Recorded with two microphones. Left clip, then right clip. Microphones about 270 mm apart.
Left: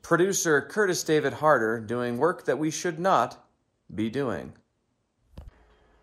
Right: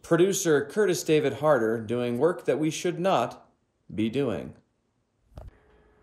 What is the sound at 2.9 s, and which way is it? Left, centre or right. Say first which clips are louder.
Speech: left 3 dB; centre.